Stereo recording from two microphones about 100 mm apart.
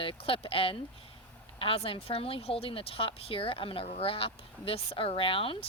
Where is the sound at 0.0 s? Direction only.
65° left (ahead or behind).